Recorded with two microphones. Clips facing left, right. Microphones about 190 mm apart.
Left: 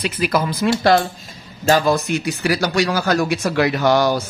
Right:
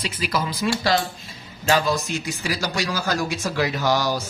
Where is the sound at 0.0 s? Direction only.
55° left (ahead or behind).